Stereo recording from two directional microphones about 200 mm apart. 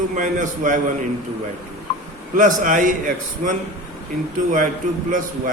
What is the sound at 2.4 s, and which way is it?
A man's voice, 40° right (ahead or behind).